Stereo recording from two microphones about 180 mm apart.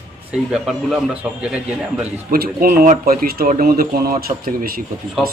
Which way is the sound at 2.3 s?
55° right (ahead or behind).